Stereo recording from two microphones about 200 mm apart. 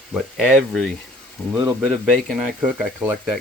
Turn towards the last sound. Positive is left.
turn(degrees=-5)  # may be behind; listen again after turning